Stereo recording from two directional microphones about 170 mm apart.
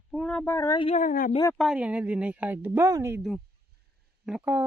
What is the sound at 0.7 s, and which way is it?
Speech, 35° left (ahead or behind).